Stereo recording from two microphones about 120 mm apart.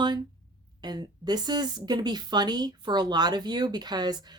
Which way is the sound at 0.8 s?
35° right (ahead or behind).